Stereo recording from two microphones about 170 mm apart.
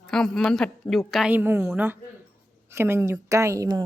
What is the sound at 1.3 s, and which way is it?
A woman's voice, 10° right (ahead or behind).